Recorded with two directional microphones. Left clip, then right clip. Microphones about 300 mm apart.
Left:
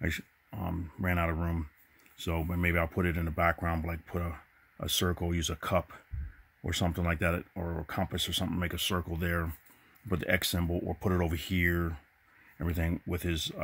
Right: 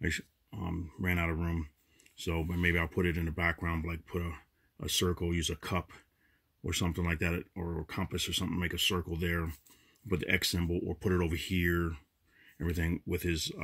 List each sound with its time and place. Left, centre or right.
0.0 s speech: centre